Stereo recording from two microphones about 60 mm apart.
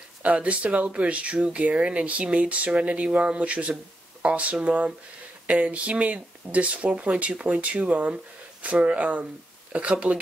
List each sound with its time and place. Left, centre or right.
0.2 s speech: right